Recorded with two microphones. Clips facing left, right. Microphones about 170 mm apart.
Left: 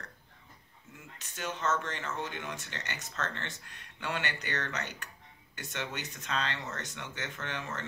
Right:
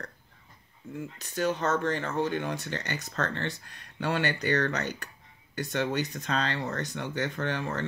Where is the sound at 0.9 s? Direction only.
35° right (ahead or behind).